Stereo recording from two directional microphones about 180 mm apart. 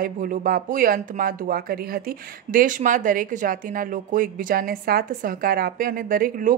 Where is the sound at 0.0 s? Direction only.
50° right (ahead or behind).